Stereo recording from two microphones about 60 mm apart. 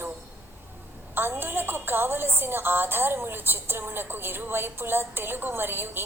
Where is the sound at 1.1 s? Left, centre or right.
Right.